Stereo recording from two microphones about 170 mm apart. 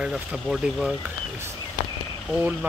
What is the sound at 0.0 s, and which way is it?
Speech, 5° right (ahead or behind).